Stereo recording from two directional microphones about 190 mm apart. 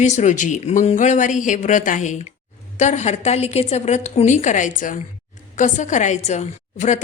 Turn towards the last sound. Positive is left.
turn(degrees=40)  # may be behind; listen again after turning